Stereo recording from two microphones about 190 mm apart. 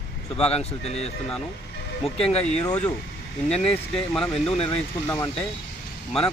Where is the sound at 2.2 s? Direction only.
30° left (ahead or behind).